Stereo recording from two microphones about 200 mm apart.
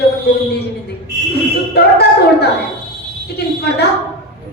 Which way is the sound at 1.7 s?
55° left (ahead or behind).